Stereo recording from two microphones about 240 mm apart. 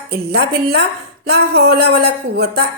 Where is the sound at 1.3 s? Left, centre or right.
Right.